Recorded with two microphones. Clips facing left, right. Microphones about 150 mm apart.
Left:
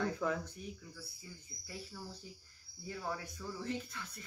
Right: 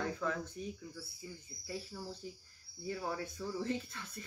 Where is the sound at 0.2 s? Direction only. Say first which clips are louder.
Left 2 dB; 15° left (ahead or behind).